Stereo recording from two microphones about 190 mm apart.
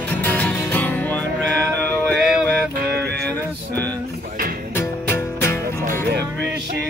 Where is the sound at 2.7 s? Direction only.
55° right (ahead or behind).